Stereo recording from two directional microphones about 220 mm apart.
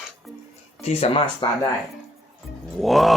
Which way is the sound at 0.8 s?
30° left (ahead or behind).